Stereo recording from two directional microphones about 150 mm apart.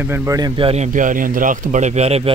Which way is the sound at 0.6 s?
40° right (ahead or behind).